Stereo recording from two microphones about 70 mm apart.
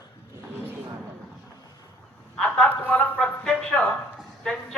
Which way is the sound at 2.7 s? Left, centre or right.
Left.